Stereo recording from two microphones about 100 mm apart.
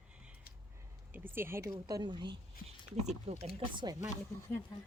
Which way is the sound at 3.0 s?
90° right.